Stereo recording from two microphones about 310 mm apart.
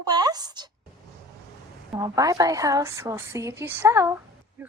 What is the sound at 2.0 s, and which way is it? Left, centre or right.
A woman's voice, centre.